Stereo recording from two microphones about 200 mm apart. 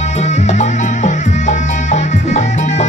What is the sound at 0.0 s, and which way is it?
Music, 35° left (ahead or behind).